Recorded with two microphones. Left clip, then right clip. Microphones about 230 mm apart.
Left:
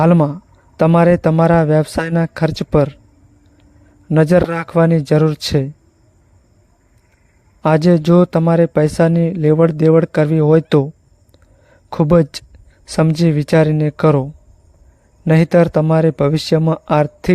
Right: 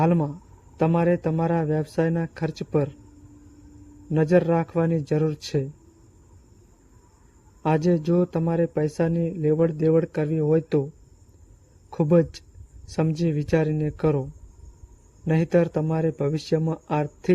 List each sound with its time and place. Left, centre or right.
0.0 s speech: left
4.1 s speech: left
7.6 s speech: left
11.9 s speech: left